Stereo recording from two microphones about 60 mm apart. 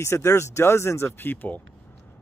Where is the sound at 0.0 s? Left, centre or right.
Left.